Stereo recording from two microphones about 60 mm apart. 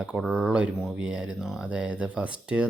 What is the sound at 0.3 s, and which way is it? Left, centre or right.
Speech, right.